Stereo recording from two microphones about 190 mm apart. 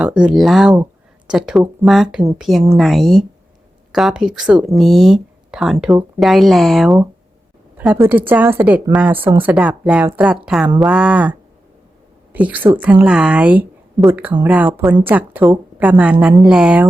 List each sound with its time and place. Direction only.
0.0 s speech: 5° right (ahead or behind)